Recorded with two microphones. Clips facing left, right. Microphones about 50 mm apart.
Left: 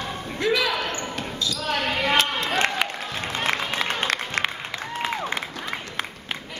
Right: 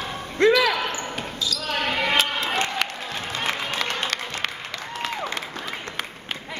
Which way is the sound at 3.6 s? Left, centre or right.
Centre.